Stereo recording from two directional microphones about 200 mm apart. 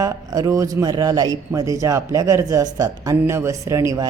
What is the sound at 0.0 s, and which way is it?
Speech, 15° right (ahead or behind).